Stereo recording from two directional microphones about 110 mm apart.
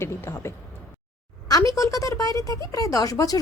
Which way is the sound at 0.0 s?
25° left (ahead or behind).